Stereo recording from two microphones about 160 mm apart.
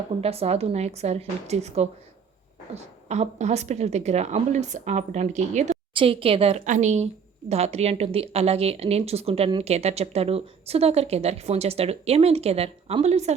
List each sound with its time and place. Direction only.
0.2 s a woman's voice: 40° right (ahead or behind)
5.9 s a woman's voice: 35° right (ahead or behind)